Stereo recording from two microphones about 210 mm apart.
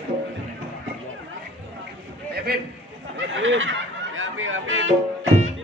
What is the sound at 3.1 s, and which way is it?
Speech, 65° right (ahead or behind).